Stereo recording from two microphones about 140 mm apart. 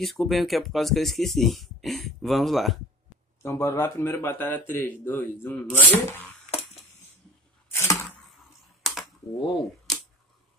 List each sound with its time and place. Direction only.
0.0 s speech: centre (ahead or behind)
3.4 s a man's voice: 15° left (ahead or behind)
7.7 s a sound: 20° left (ahead or behind)
8.8 s computer keyboard: centre (ahead or behind)